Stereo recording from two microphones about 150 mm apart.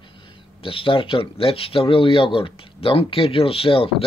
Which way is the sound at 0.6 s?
35° left (ahead or behind).